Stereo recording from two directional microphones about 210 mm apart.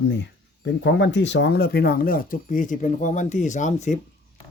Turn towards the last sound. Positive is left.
turn(degrees=35)  # may be behind; listen again after turning